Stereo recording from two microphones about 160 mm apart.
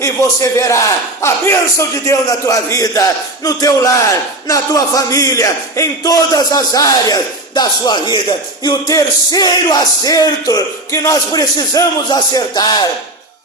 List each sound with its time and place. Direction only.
0.0 s speech: 20° left (ahead or behind)